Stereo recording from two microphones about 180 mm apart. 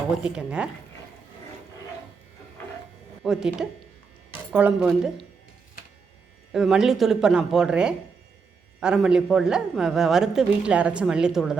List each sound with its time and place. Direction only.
0.2 s a woman's voice: 5° right (ahead or behind)
3.2 s a woman's voice: 5° right (ahead or behind)
6.5 s a woman's voice: centre (ahead or behind)